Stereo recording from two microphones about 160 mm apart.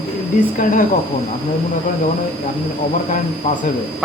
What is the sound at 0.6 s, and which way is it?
Speech, 55° left (ahead or behind).